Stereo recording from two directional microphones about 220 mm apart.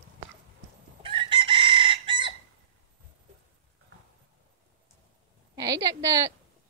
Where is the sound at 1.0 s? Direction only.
25° right (ahead or behind).